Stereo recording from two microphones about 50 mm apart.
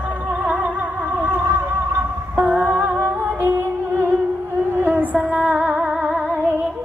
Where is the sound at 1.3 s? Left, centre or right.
Right.